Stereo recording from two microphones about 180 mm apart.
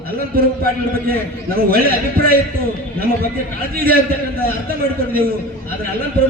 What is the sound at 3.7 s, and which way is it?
Speech, 55° right (ahead or behind).